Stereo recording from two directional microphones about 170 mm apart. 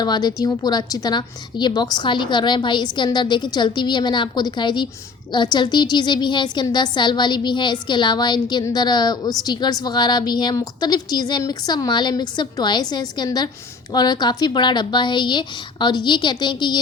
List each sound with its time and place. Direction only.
0.0 s a woman's voice: 25° left (ahead or behind)